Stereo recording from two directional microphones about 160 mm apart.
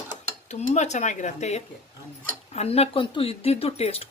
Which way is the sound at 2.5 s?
40° left (ahead or behind).